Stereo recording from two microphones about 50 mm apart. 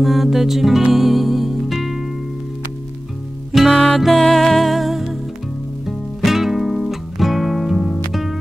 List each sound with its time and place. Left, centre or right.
0.0 s music: centre
3.7 s music: centre
4.0 s music: centre